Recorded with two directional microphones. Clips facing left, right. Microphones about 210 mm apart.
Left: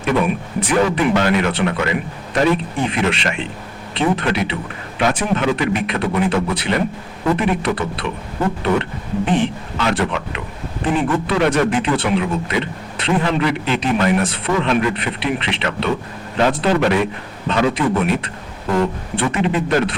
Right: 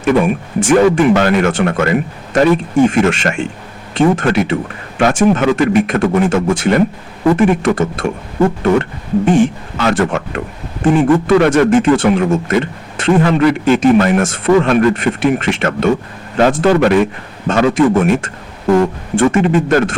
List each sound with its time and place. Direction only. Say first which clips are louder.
0.6 s a man's voice: right 7 dB; 45° right (ahead or behind)